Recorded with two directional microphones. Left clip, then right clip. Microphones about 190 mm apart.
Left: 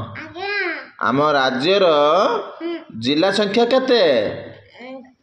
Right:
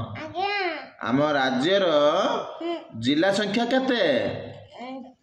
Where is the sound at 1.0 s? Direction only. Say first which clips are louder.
Left 6 dB; 30° left (ahead or behind).